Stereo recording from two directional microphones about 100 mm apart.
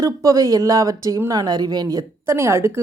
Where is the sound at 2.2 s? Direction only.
25° right (ahead or behind).